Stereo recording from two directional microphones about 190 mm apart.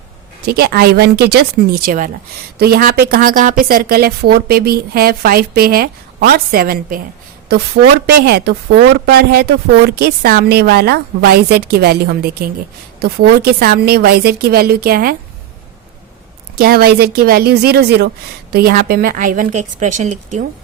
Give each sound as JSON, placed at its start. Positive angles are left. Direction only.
{"t": 0.4, "sound": "a woman's voice", "side_deg": -55}
{"t": 8.0, "sound": "a woman's voice", "side_deg": -55}
{"t": 16.6, "sound": "a woman's voice", "side_deg": -50}